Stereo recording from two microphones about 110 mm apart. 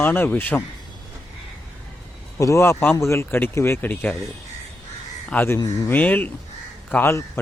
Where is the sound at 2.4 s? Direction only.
25° left (ahead or behind).